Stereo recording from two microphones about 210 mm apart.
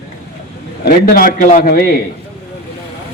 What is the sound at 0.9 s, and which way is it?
A man's voice, 45° left (ahead or behind).